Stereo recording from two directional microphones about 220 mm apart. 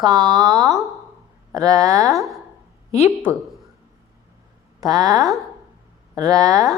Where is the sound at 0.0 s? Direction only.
15° right (ahead or behind).